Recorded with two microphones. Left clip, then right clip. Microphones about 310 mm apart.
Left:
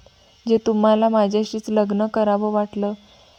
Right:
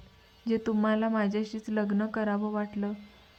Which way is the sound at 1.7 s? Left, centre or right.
Left.